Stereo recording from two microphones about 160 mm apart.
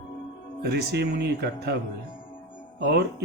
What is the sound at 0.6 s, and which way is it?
Speech, 90° right.